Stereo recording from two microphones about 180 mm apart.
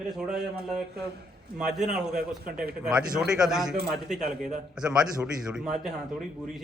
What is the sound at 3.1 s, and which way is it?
A man's voice, 5° right (ahead or behind).